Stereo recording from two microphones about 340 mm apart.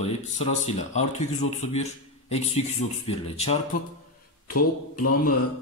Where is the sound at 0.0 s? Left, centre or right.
Centre.